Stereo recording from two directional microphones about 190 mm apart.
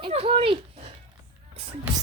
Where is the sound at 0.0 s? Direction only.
30° right (ahead or behind).